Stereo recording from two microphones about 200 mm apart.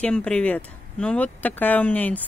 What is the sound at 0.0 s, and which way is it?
Speech, 5° left (ahead or behind).